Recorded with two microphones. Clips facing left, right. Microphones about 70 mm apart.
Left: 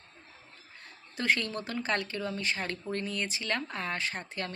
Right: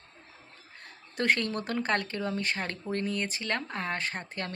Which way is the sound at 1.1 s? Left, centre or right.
Right.